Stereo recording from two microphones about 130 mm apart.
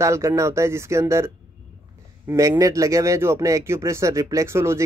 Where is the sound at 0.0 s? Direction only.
20° right (ahead or behind).